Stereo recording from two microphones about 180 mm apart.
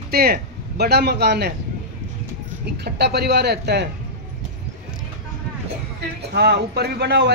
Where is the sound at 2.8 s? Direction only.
65° right (ahead or behind).